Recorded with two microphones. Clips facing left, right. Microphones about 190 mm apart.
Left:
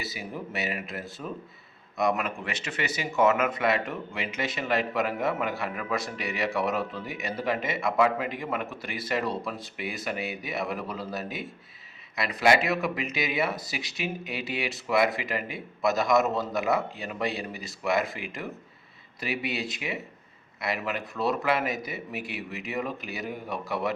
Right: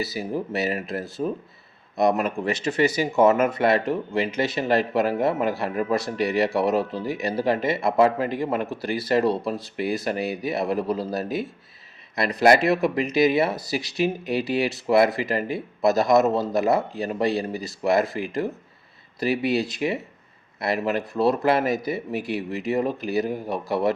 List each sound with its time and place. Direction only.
0.0 s speech: 35° right (ahead or behind)